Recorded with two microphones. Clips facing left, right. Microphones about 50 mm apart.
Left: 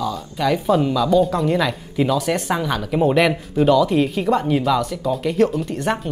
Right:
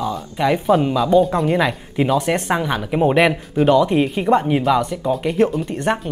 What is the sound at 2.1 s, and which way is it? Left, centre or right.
Speech, right.